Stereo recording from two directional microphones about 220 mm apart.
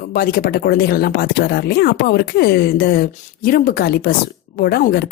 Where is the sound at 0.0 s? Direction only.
45° left (ahead or behind).